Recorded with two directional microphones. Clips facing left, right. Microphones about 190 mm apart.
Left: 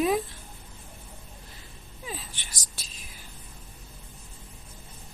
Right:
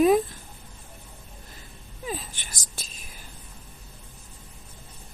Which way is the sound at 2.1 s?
50° right (ahead or behind).